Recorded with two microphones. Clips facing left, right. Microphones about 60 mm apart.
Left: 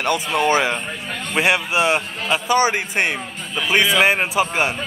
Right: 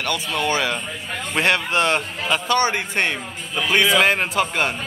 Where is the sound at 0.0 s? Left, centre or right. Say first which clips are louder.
Left 4 dB; left.